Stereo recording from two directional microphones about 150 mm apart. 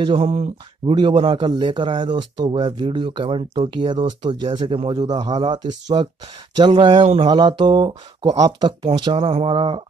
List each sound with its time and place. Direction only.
0.2 s speech: 45° right (ahead or behind)
0.9 s speech: 35° right (ahead or behind)